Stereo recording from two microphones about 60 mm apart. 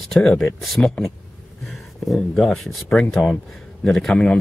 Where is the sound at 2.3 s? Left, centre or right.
Centre.